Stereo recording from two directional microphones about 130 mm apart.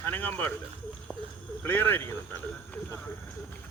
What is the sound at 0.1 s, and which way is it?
Speech, 15° left (ahead or behind).